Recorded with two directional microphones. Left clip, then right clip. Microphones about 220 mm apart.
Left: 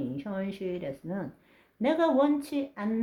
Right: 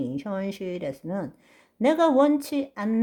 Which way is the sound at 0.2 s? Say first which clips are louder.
Right 4 dB; 45° right (ahead or behind).